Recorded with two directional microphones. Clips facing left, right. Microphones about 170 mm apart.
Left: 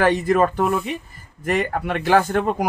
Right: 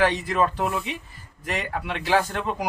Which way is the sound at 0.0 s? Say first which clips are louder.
Left 5 dB; 50° left (ahead or behind).